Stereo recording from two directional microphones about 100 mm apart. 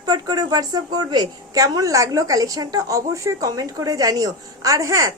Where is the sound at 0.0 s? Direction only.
40° right (ahead or behind).